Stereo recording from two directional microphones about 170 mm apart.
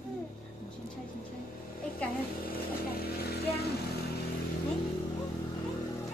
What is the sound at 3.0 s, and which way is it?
Vehicle, 70° left (ahead or behind).